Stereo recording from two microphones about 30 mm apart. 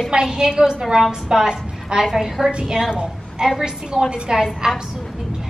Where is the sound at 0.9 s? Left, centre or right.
Centre.